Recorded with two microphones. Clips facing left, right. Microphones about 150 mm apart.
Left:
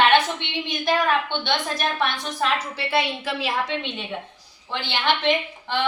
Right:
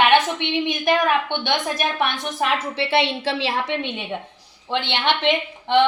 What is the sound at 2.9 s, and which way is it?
Speech, 30° right (ahead or behind).